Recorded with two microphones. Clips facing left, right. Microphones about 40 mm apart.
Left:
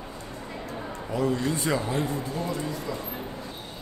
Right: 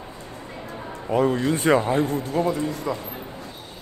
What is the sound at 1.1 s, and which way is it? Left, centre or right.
Speech, right.